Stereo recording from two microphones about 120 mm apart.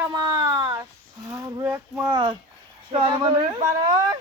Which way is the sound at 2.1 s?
40° right (ahead or behind).